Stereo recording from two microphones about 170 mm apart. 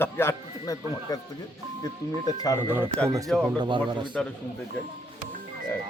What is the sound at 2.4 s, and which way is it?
Speech, 20° left (ahead or behind).